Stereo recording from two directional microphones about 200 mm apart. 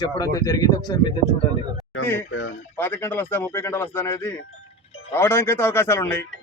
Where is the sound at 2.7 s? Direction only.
10° left (ahead or behind).